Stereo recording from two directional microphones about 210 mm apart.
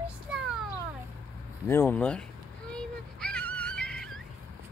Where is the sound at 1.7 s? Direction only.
10° left (ahead or behind).